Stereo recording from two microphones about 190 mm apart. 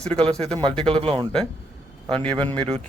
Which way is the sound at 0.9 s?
25° right (ahead or behind).